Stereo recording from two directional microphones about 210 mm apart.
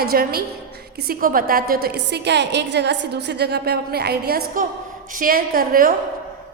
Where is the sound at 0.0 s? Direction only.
45° right (ahead or behind).